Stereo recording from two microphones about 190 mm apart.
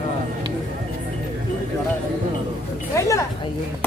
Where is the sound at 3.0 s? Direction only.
15° left (ahead or behind).